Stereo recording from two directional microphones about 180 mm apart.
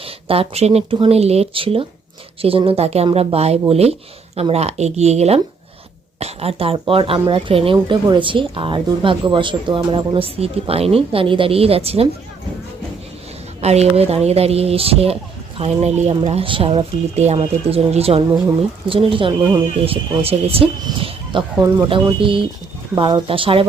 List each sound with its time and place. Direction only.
0.0 s a woman's voice: 30° right (ahead or behind)
13.6 s a woman's voice: 35° right (ahead or behind)